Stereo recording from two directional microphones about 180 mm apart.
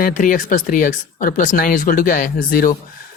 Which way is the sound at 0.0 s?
45° left (ahead or behind).